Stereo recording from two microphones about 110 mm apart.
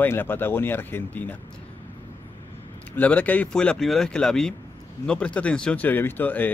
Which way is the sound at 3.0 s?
15° left (ahead or behind).